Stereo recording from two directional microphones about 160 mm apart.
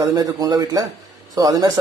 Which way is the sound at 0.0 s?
20° right (ahead or behind).